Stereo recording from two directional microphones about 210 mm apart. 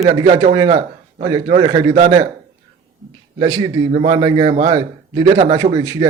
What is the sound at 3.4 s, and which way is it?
A man's voice, 20° right (ahead or behind).